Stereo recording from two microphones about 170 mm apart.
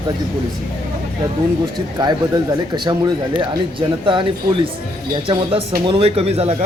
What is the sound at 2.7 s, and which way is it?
Speech, 25° right (ahead or behind).